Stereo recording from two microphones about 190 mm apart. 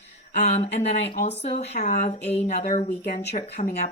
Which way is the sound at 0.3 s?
35° left (ahead or behind).